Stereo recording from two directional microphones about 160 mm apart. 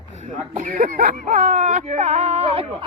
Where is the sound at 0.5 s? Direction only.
60° right (ahead or behind).